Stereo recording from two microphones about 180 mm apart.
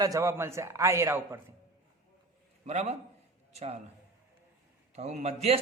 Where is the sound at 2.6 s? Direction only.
35° right (ahead or behind).